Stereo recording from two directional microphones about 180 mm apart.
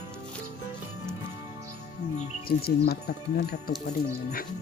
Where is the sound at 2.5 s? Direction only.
60° left (ahead or behind).